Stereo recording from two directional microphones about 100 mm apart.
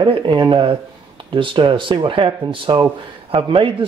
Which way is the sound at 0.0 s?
55° right (ahead or behind).